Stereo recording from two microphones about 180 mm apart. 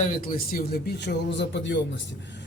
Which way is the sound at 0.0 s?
50° left (ahead or behind).